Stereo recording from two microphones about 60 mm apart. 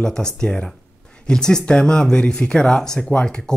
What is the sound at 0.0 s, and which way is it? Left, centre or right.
Speech, centre.